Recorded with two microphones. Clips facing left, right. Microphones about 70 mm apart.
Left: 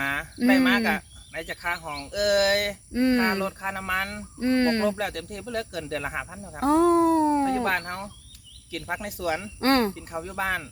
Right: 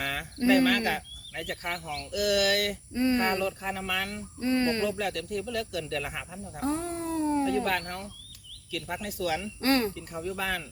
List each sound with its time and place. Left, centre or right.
0.0 s speech: left
2.9 s speech: left
6.6 s speech: left
9.6 s speech: left
9.9 s speech: left